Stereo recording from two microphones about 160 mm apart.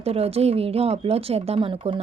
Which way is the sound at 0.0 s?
40° right (ahead or behind).